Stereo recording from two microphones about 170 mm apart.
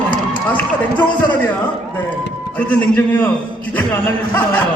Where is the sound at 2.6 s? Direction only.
10° left (ahead or behind).